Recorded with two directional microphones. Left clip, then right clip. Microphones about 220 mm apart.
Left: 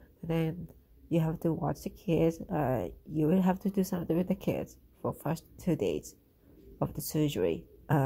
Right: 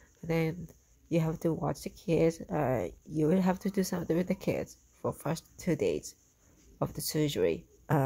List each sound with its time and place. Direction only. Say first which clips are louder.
0.3 s speech: right 2 dB; 20° right (ahead or behind)